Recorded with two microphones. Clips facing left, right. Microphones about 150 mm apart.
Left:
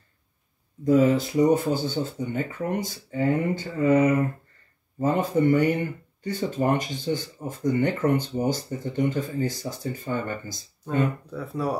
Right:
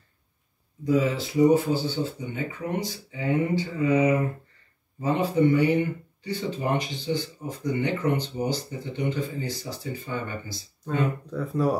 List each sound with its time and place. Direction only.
0.8 s speech: 50° left (ahead or behind)
10.9 s speech: 5° left (ahead or behind)